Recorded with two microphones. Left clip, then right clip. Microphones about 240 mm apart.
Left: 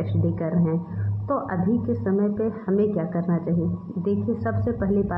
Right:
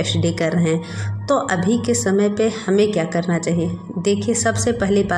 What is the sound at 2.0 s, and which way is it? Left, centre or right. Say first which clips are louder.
A woman's voice: right 7 dB; right.